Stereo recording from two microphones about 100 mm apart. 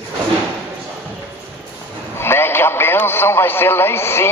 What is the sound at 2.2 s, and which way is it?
Speech, 25° left (ahead or behind).